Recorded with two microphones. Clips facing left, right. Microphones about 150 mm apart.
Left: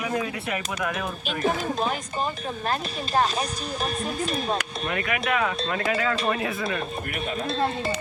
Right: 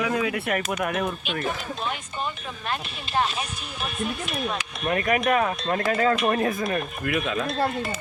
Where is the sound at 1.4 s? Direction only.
40° left (ahead or behind).